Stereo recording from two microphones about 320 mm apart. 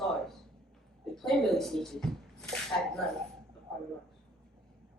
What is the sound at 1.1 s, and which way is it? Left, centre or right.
Speech, centre.